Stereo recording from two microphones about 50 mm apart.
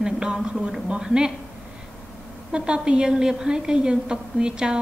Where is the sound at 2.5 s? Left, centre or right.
Centre.